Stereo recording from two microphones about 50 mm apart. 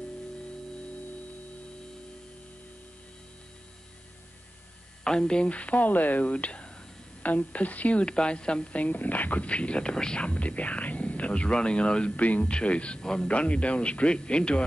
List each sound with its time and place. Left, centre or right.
5.0 s a woman's voice: centre
13.3 s a woman's voice: left